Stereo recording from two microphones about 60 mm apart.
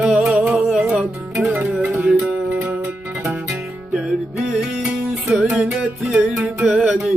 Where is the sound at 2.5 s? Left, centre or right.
Right.